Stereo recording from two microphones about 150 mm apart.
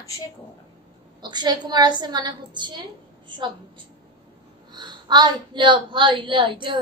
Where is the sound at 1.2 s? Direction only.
30° right (ahead or behind).